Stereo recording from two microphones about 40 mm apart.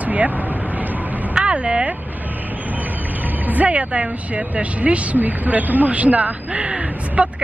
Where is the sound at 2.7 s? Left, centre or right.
Right.